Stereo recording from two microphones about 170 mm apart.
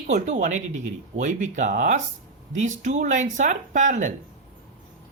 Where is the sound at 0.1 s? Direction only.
45° right (ahead or behind).